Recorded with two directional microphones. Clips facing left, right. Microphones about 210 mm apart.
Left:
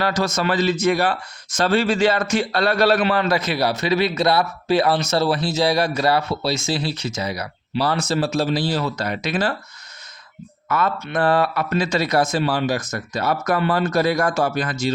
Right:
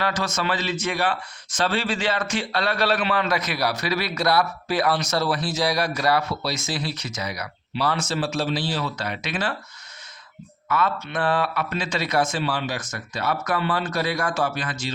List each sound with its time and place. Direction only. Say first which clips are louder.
0.0 s speech: left 5 dB; 40° left (ahead or behind)
10.7 s speech: left 2 dB; 45° left (ahead or behind)